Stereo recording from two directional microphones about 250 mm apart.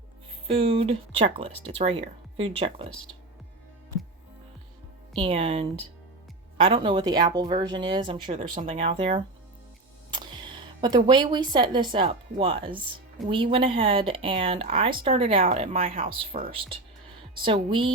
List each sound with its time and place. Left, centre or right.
0.4 s speech: right
2.9 s speech: centre
5.1 s a woman's voice: right